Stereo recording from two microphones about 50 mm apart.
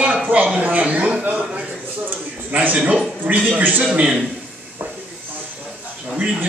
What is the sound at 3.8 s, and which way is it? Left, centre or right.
Speech, right.